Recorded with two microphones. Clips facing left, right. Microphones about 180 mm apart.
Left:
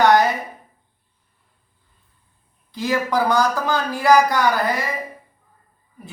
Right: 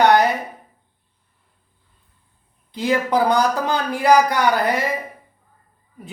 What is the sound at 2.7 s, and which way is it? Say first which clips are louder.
Speech: right 2 dB; 20° right (ahead or behind).